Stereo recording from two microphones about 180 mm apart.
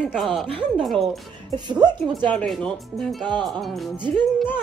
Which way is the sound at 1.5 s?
25° right (ahead or behind).